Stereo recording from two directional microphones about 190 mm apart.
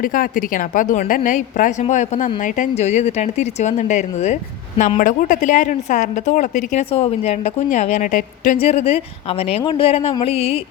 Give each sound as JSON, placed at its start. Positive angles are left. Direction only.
{"t": 0.0, "sound": "a woman's voice", "side_deg": 45}
{"t": 8.5, "sound": "a woman's voice", "side_deg": 30}